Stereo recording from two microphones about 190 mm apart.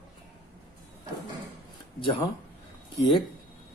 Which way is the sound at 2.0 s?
25° left (ahead or behind).